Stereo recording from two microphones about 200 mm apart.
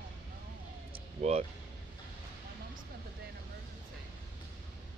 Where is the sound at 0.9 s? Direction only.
30° right (ahead or behind).